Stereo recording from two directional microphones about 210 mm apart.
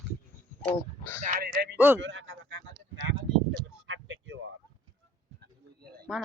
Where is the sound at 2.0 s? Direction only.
60° right (ahead or behind).